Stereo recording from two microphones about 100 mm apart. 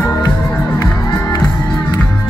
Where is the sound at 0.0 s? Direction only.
35° left (ahead or behind).